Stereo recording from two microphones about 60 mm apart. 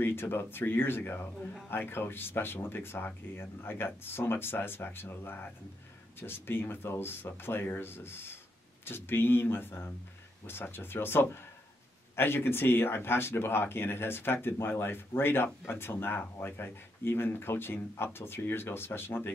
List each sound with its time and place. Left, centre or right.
0.0 s speech: left